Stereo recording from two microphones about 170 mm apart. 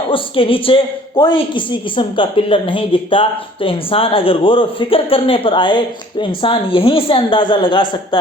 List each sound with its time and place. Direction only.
0.1 s a woman's voice: 30° left (ahead or behind)